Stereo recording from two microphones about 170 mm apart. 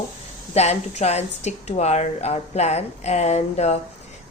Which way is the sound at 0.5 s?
40° left (ahead or behind).